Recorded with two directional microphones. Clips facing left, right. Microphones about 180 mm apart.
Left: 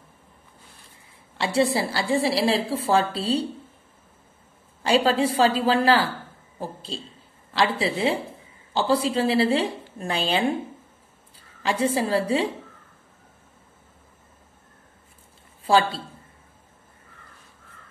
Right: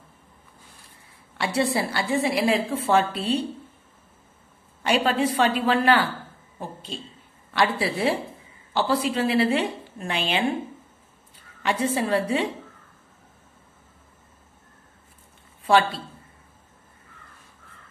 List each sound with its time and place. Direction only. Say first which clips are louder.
1.4 s a woman's voice: left 2 dB; 25° left (ahead or behind)
4.8 s a woman's voice: left 2 dB; 30° left (ahead or behind)
11.6 s a woman's voice: left 1 dB; 30° left (ahead or behind)
15.6 s a woman's voice: even; 30° left (ahead or behind)